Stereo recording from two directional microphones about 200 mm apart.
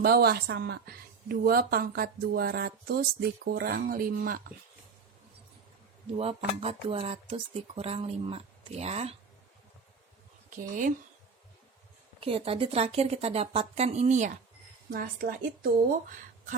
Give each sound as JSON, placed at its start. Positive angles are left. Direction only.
{"t": 0.0, "sound": "a woman's voice", "side_deg": -50}
{"t": 6.1, "sound": "speech", "side_deg": -30}
{"t": 10.5, "sound": "speech", "side_deg": -40}
{"t": 12.2, "sound": "a woman's voice", "side_deg": -30}